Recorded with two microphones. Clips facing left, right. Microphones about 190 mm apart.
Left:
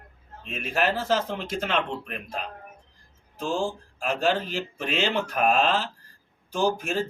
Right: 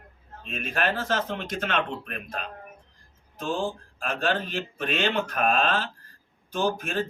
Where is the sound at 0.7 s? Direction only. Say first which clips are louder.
Left 3 dB; 10° left (ahead or behind).